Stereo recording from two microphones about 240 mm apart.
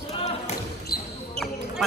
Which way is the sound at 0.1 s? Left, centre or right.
Left.